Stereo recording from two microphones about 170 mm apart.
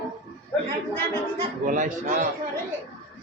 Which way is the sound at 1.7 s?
50° right (ahead or behind).